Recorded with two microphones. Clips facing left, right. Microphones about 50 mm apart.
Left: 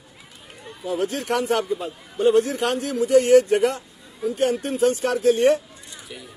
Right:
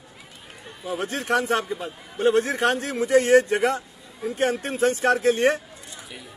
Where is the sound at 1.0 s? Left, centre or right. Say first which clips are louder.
Even; right.